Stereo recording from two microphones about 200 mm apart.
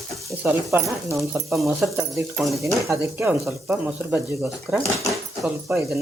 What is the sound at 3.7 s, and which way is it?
Speech, 10° right (ahead or behind).